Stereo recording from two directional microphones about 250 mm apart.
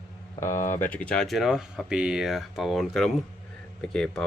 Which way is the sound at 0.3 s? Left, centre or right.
Centre.